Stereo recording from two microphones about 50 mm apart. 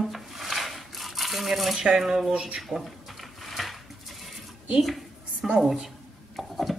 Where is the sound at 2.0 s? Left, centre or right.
Centre.